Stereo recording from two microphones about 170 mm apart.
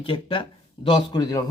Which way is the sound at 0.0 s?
30° left (ahead or behind).